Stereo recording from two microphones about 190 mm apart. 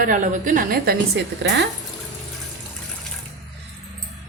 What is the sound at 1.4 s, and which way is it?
Speech, 65° right (ahead or behind).